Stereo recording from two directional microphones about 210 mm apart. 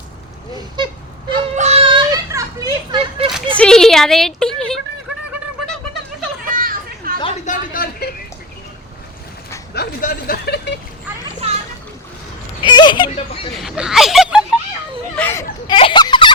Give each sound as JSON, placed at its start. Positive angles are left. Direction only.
{"t": 1.5, "sound": "children playing", "side_deg": -30}
{"t": 2.9, "sound": "a sound", "side_deg": -25}
{"t": 3.6, "sound": "a woman's voice", "side_deg": 5}
{"t": 6.4, "sound": "children playing", "side_deg": -40}
{"t": 7.2, "sound": "a sound", "side_deg": 30}
{"t": 9.7, "sound": "speech", "side_deg": 45}
{"t": 11.4, "sound": "splash", "side_deg": -30}
{"t": 12.6, "sound": "speech", "side_deg": 20}
{"t": 13.6, "sound": "speech", "side_deg": 0}
{"t": 15.1, "sound": "speech", "side_deg": 10}
{"t": 15.6, "sound": "a sound", "side_deg": 25}